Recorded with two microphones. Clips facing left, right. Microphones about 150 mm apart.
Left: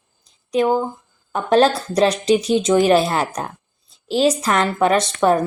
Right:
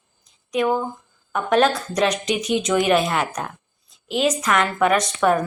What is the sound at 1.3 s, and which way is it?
A woman's voice, 30° left (ahead or behind).